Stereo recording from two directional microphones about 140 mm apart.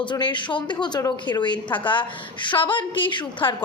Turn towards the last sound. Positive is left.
turn(degrees=35)  # may be behind; listen again after turning